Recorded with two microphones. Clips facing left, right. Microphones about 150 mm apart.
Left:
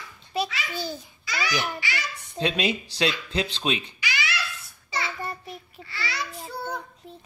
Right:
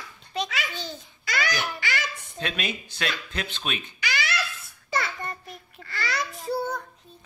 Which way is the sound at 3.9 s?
50° right (ahead or behind).